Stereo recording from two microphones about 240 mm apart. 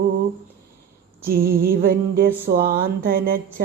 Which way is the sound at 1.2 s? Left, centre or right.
Right.